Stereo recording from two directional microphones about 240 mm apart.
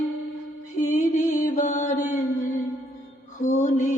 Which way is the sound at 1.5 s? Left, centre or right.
Left.